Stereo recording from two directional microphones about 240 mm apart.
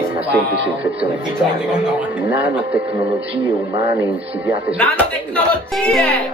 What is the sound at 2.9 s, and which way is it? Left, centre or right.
Speech, right.